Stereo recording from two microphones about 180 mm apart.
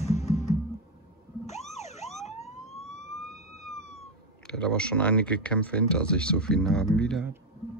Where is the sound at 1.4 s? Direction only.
40° left (ahead or behind).